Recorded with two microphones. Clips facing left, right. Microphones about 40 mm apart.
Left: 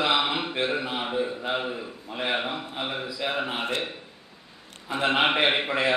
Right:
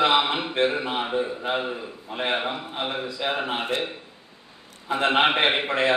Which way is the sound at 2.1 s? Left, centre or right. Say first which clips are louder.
Right 2 dB; right.